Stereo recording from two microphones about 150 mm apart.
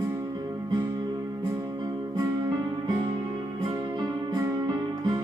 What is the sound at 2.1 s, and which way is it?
Music, 25° right (ahead or behind).